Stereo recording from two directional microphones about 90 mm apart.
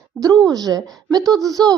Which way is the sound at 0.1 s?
Centre (ahead or behind).